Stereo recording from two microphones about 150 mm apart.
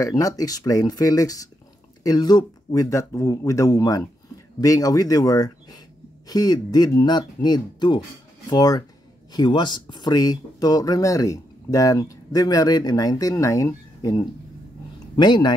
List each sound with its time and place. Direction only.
0.0 s speech: 25° left (ahead or behind)